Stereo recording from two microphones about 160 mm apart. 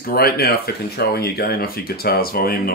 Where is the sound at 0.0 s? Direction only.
70° left (ahead or behind).